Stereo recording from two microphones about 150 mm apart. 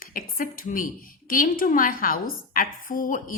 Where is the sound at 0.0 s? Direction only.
70° left (ahead or behind).